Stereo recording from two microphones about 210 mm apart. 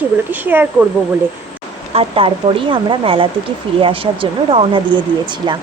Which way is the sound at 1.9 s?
25° right (ahead or behind).